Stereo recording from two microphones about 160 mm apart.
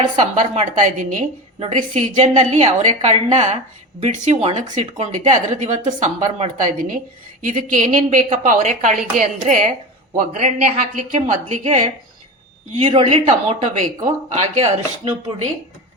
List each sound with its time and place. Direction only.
0.2 s speech: 50° right (ahead or behind)
12.7 s speech: 35° right (ahead or behind)
13.7 s speech: 50° right (ahead or behind)